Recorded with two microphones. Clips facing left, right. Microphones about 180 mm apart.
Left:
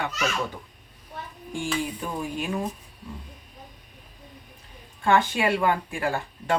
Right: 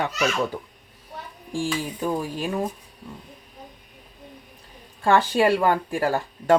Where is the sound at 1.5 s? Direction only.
35° right (ahead or behind).